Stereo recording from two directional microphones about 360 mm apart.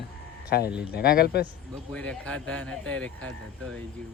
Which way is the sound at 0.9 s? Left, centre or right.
Left.